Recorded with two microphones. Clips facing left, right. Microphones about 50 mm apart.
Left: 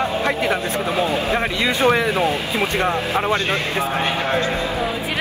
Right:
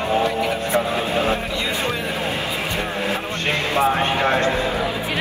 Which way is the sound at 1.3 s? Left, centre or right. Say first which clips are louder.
Left 3 dB; left.